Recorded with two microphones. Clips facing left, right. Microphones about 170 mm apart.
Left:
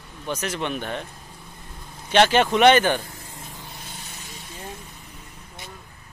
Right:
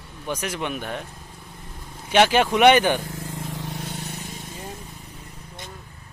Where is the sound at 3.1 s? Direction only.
90° right.